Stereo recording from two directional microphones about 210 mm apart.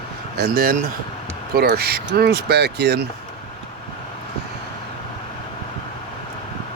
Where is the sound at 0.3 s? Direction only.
45° right (ahead or behind).